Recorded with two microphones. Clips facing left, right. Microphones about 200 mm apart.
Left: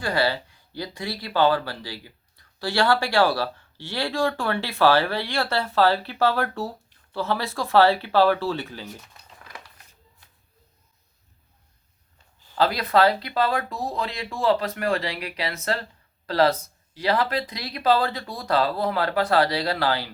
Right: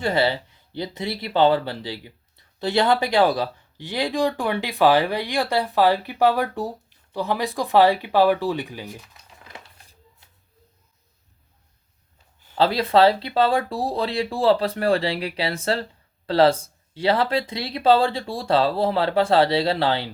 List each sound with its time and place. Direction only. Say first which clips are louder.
0.0 s speech: right 3 dB; 20° right (ahead or behind)
9.5 s a sound: right 1 dB; 25° right (ahead or behind)
12.5 s speech: right 3 dB; 30° right (ahead or behind)